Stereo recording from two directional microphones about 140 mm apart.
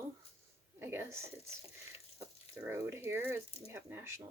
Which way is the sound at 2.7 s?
15° right (ahead or behind).